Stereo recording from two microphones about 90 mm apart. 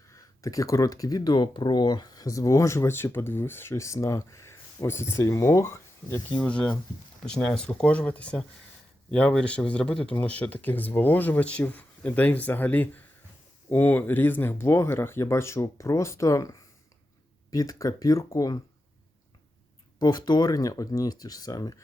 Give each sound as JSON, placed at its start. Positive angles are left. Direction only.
{"t": 0.1, "sound": "speech", "side_deg": 40}
{"t": 20.0, "sound": "speech", "side_deg": 50}